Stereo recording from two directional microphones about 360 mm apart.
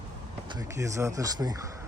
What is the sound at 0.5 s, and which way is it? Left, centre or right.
Speech, centre.